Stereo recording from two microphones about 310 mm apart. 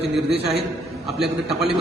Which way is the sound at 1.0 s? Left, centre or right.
Centre.